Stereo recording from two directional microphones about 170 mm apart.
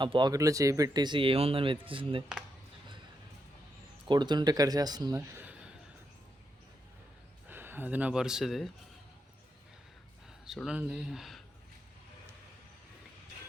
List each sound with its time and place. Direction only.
0.0 s speech: 25° right (ahead or behind)
4.1 s speech: 25° right (ahead or behind); by 5.7 s 5° right (ahead or behind)
7.4 s speech: 10° right (ahead or behind)
10.4 s speech: centre (ahead or behind)